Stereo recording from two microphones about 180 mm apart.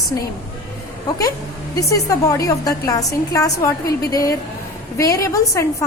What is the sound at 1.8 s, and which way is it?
A woman's voice, 20° left (ahead or behind).